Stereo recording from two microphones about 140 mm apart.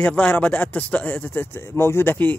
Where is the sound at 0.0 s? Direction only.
10° left (ahead or behind).